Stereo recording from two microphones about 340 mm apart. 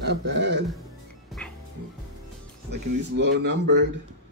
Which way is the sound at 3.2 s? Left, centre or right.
Right.